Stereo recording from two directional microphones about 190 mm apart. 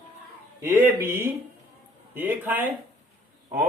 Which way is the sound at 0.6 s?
15° right (ahead or behind).